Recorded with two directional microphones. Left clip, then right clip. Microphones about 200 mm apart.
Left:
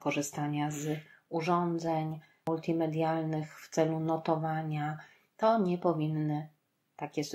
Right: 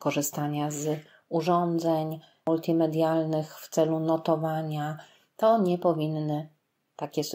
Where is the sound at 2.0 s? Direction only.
10° right (ahead or behind).